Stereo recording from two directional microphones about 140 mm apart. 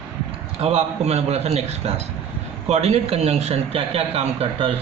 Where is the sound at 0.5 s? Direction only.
50° right (ahead or behind).